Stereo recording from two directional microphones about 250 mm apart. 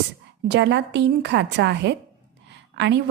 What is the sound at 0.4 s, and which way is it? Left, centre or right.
A woman's voice, right.